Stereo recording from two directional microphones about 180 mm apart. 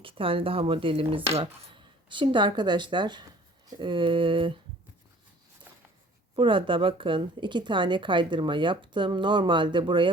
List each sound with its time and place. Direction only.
0.0 s a woman's voice: 30° right (ahead or behind)
6.3 s a woman's voice: 30° right (ahead or behind)